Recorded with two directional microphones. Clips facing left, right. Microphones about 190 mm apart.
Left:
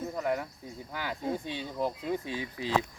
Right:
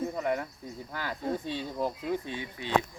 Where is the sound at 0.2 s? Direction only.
Centre (ahead or behind).